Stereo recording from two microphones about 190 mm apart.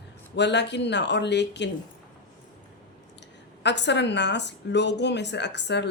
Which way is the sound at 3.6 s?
65° left (ahead or behind).